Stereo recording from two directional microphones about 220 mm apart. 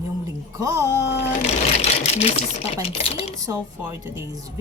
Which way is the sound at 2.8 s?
25° left (ahead or behind).